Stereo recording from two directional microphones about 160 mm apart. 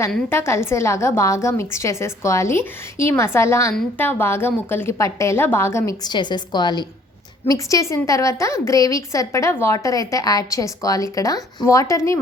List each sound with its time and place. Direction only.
0.3 s a woman's voice: 15° left (ahead or behind)